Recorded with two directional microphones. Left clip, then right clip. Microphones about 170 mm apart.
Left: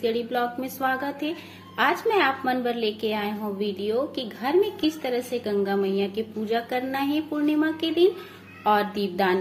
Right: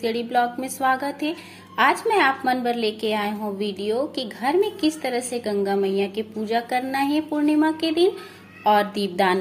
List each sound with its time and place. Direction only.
0.0 s a woman's voice: 20° right (ahead or behind)